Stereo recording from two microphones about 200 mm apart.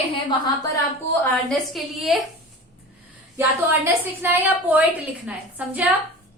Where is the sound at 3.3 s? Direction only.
10° right (ahead or behind).